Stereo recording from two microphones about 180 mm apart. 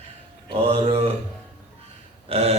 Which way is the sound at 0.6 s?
35° right (ahead or behind).